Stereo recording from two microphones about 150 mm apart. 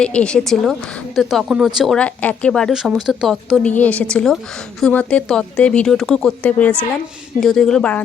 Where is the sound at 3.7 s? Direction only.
10° left (ahead or behind).